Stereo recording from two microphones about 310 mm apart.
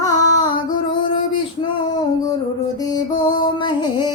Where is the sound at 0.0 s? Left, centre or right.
Centre.